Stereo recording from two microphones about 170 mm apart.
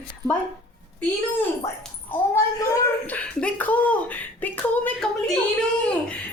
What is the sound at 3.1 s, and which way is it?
A woman's voice, 10° left (ahead or behind).